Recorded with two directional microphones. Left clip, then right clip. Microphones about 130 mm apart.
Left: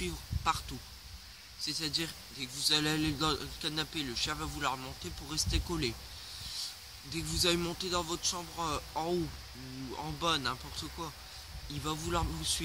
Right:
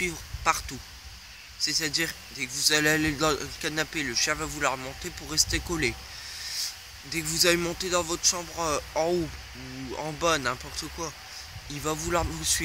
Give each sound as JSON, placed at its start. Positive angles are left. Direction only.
{"t": 0.0, "sound": "speech", "side_deg": 25}
{"t": 7.2, "sound": "speech", "side_deg": 25}